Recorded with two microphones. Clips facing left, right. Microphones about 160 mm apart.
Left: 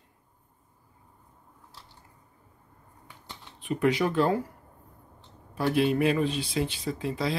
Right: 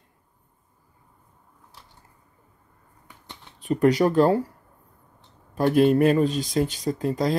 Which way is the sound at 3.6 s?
40° right (ahead or behind).